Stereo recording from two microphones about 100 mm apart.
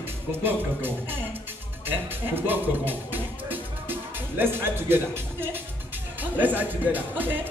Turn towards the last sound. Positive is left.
turn(degrees=-20)  # may be behind; listen again after turning